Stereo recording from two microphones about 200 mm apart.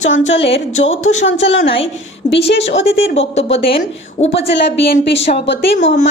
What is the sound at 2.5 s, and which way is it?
Speech, 65° left (ahead or behind).